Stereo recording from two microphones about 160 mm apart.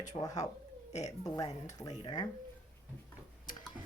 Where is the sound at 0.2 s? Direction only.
20° left (ahead or behind).